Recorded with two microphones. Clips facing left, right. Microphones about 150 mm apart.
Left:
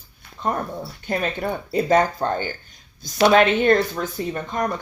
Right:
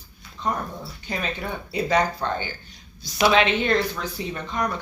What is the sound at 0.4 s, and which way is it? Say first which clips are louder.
Speech: left 3 dB; 50° left (ahead or behind).